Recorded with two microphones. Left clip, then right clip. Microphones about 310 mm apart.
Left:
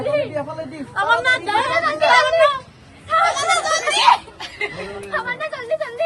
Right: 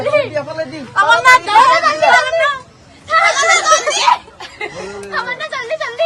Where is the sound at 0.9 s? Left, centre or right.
Centre.